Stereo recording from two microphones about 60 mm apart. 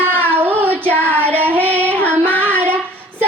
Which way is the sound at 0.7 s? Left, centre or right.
Left.